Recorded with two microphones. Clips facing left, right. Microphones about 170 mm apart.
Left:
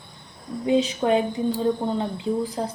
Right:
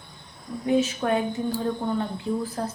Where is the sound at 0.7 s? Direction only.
20° left (ahead or behind).